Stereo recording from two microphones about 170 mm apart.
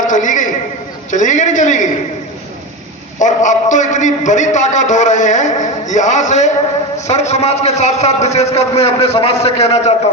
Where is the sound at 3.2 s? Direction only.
45° left (ahead or behind).